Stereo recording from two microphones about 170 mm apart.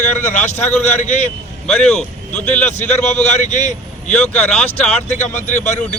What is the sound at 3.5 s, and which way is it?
Speech, 45° left (ahead or behind).